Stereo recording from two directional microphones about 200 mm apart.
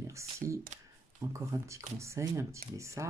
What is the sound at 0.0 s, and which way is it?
Speech, 15° right (ahead or behind).